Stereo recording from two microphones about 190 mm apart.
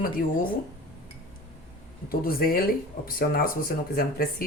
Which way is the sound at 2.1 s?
50° left (ahead or behind).